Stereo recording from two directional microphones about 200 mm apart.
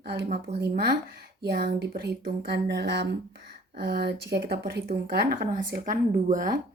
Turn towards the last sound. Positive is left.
turn(degrees=-40)  # may be behind; listen again after turning